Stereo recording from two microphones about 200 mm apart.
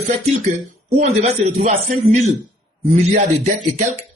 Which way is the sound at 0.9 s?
35° right (ahead or behind).